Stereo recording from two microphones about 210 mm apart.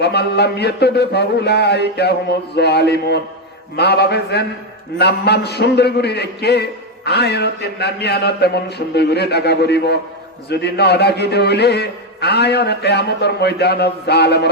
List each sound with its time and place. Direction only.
0.0 s a man's voice: 50° left (ahead or behind)